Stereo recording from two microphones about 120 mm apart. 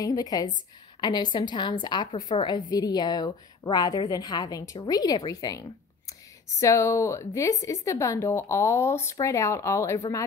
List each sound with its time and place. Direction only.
0.0 s a woman's voice: 30° left (ahead or behind)